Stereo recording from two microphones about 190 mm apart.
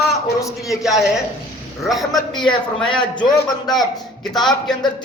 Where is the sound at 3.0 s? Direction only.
25° left (ahead or behind).